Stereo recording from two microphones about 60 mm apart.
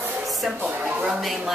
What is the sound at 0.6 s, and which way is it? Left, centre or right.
Speech, right.